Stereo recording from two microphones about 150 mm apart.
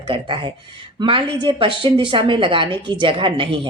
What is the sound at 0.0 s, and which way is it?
A woman's voice, 35° right (ahead or behind).